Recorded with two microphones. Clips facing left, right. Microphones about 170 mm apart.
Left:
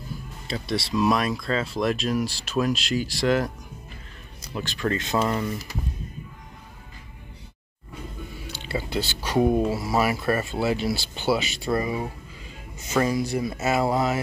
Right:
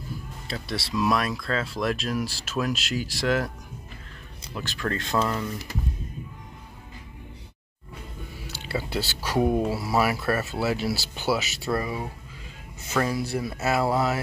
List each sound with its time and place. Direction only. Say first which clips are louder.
0.5 s speech: left 4 dB; 5° right (ahead or behind)
4.6 s speech: left 3 dB; centre (ahead or behind)
8.9 s speech: left 3 dB; 5° right (ahead or behind)
10.1 s speech: left 2 dB; 15° left (ahead or behind)
10.4 s speech: left 2 dB; 5° right (ahead or behind)
11.6 s speech: left 2 dB; 15° left (ahead or behind)